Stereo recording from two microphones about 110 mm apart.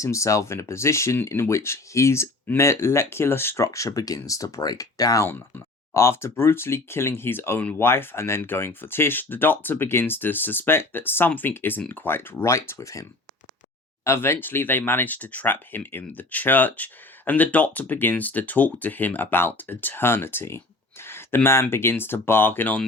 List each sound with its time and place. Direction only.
0.0 s speech: 30° left (ahead or behind)